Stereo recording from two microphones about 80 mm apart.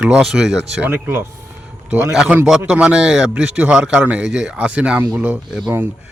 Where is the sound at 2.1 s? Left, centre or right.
Centre.